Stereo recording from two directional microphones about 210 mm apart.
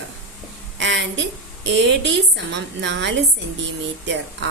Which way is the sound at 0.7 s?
60° right (ahead or behind).